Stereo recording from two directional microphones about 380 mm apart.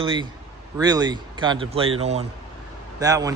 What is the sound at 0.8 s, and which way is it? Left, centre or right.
Speech, centre.